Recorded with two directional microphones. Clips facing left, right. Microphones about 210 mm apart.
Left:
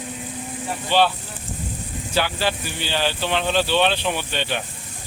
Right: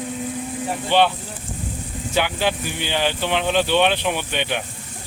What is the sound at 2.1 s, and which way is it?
Speech, 15° right (ahead or behind).